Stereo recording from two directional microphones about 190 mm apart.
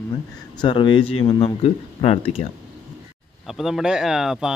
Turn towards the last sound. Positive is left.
turn(degrees=0)  # may be behind; listen again after turning